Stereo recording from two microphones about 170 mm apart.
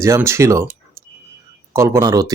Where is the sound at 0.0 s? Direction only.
15° right (ahead or behind).